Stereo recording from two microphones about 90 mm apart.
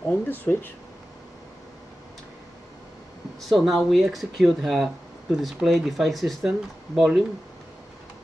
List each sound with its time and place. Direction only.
0.1 s speech: 20° left (ahead or behind)
3.3 s speech: centre (ahead or behind)